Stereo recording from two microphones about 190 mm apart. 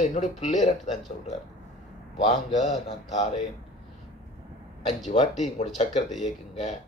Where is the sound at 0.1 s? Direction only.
40° left (ahead or behind).